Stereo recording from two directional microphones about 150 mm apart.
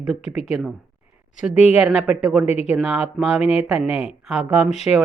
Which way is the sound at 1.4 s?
5° right (ahead or behind).